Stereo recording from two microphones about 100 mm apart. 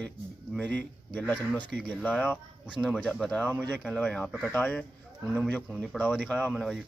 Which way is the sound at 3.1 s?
10° left (ahead or behind).